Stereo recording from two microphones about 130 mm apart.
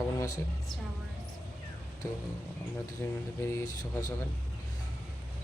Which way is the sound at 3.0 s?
20° left (ahead or behind).